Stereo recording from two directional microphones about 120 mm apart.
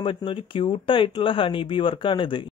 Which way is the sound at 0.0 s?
45° left (ahead or behind).